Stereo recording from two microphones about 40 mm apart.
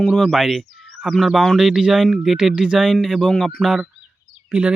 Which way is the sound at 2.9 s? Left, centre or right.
Centre.